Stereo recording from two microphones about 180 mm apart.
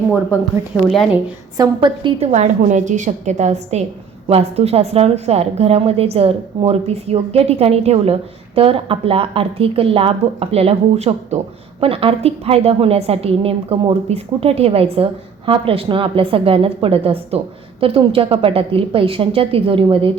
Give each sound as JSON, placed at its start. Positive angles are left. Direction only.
{"t": 0.1, "sound": "speech", "side_deg": -10}
{"t": 0.9, "sound": "a woman's voice", "side_deg": 0}
{"t": 1.5, "sound": "a woman's voice", "side_deg": -25}